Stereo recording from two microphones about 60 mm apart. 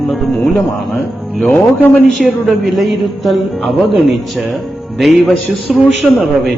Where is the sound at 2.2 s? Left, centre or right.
Centre.